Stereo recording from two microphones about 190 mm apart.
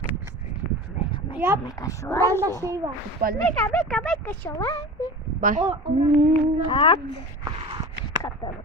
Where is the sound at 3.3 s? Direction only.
10° left (ahead or behind).